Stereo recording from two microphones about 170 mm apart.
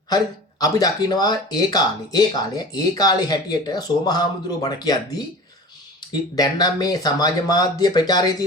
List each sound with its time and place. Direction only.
0.6 s speech: 20° left (ahead or behind)
6.3 s speech: 25° left (ahead or behind)